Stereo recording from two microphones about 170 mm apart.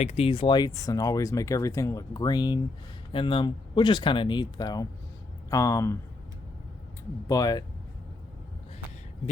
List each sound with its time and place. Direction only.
0.0 s speech: 40° left (ahead or behind); by 6.0 s 15° left (ahead or behind)
7.3 s speech: 20° left (ahead or behind)